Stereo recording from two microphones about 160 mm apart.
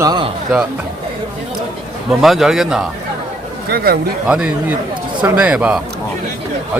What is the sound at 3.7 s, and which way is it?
Speech, 70° right (ahead or behind).